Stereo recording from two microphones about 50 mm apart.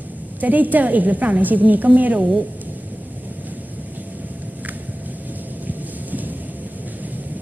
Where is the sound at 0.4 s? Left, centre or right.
Right.